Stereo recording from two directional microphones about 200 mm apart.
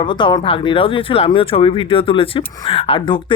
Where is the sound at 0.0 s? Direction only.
25° left (ahead or behind).